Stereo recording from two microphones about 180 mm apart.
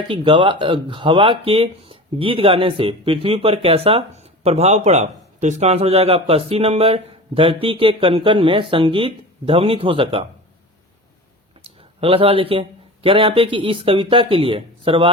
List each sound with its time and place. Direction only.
0.1 s speech: 25° right (ahead or behind)
11.6 s speech: 30° right (ahead or behind)